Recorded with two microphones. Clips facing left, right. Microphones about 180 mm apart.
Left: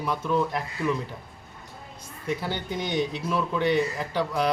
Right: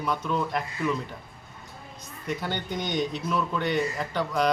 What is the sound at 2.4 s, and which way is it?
A man's voice, 5° left (ahead or behind).